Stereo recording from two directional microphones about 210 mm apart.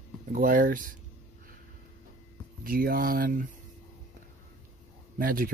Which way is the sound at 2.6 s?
45° right (ahead or behind).